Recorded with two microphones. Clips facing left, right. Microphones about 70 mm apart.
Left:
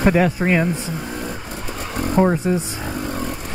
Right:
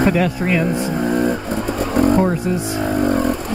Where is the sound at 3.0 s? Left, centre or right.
Right.